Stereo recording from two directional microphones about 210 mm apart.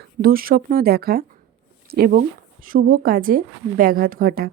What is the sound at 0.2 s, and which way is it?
A woman's voice, 45° right (ahead or behind).